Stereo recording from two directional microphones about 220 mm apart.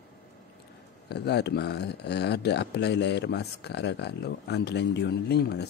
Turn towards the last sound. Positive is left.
turn(degrees=45)  # may be behind; listen again after turning